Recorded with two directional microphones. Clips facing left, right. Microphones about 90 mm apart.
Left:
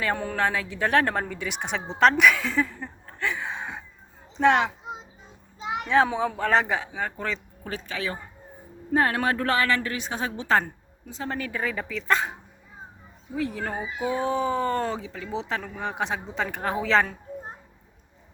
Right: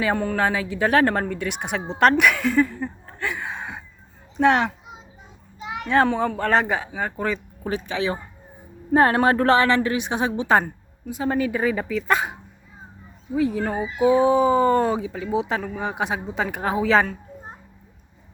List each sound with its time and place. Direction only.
0.0 s speech: centre (ahead or behind)
5.5 s children playing: 20° left (ahead or behind)
5.9 s speech: centre (ahead or behind); by 8.2 s 20° right (ahead or behind)
8.9 s a woman's voice: 35° right (ahead or behind); by 17.2 s 5° right (ahead or behind)